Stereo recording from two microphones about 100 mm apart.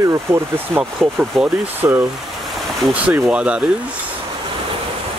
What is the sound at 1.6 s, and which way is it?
Speech, 20° right (ahead or behind).